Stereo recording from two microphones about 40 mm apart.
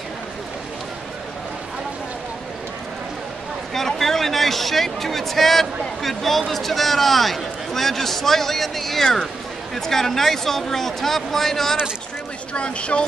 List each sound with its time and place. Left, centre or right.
3.7 s a man's voice: centre
12.5 s speech: left